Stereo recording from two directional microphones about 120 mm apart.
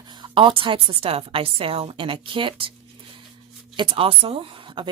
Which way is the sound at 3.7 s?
45° right (ahead or behind).